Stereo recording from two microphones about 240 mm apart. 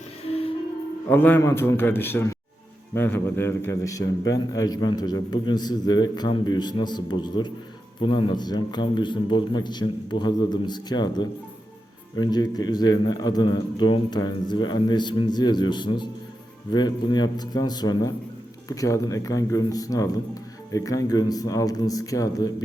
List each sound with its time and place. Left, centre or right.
0.3 s music: left
1.1 s a man's voice: centre